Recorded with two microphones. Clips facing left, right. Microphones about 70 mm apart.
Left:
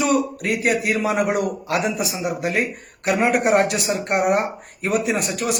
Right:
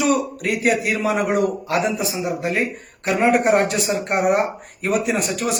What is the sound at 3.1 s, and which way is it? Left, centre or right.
A man's voice, centre.